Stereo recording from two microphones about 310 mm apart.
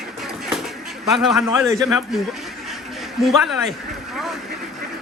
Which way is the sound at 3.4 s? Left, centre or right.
Centre.